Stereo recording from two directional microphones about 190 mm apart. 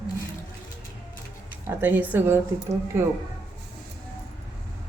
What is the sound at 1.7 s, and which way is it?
Speech, 10° right (ahead or behind).